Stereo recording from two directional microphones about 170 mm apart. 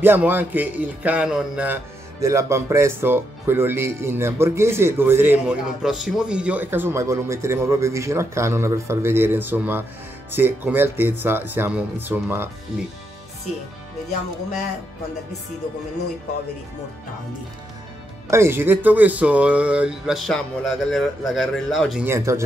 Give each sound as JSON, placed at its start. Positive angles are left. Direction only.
{"t": 0.0, "sound": "speech", "side_deg": -10}
{"t": 18.3, "sound": "speech", "side_deg": -15}
{"t": 22.0, "sound": "speech", "side_deg": -15}